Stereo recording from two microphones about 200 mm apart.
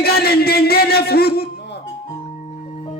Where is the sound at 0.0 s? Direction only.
50° left (ahead or behind).